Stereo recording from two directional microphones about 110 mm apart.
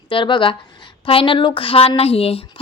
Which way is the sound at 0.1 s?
50° left (ahead or behind).